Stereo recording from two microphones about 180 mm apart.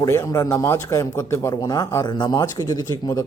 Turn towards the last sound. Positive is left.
turn(degrees=20)  # may be behind; listen again after turning